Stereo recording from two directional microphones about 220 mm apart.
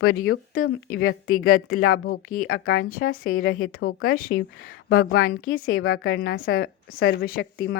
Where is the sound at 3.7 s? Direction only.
70° left (ahead or behind).